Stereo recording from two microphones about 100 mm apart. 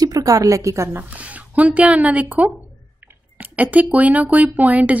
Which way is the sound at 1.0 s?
15° right (ahead or behind).